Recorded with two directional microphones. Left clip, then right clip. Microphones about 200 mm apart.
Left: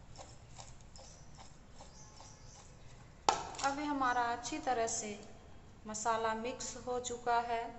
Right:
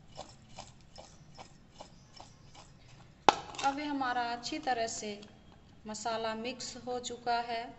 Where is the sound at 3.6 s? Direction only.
25° right (ahead or behind).